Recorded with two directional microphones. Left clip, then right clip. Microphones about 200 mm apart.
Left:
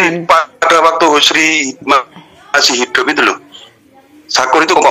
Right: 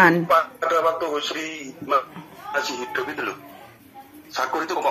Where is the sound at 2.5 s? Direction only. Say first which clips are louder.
Left 15 dB; 55° left (ahead or behind).